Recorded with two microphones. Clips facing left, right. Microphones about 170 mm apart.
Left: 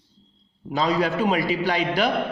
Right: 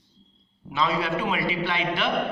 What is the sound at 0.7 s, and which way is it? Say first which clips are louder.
A man's voice: left 4 dB; 40° left (ahead or behind).